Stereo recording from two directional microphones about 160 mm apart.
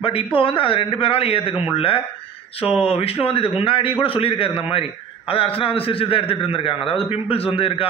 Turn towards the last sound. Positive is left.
turn(degrees=35)  # may be behind; listen again after turning